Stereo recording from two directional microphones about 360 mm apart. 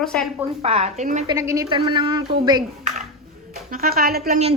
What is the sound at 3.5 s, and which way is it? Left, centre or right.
A woman's voice, right.